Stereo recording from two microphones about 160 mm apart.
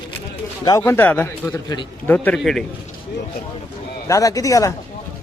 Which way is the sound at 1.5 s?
25° left (ahead or behind).